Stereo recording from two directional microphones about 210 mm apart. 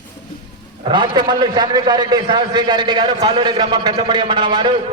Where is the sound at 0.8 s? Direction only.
20° right (ahead or behind).